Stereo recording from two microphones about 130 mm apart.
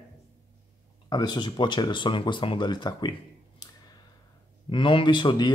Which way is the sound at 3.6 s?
30° left (ahead or behind).